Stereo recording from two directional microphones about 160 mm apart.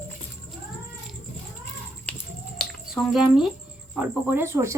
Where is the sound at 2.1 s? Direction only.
10° left (ahead or behind).